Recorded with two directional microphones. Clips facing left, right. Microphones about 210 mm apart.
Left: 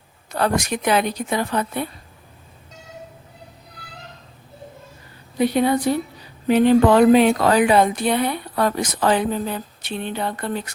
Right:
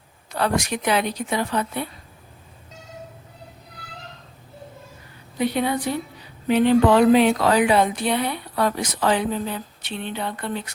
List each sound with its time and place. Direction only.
0.3 s speech: 45° left (ahead or behind)
5.4 s speech: 45° left (ahead or behind)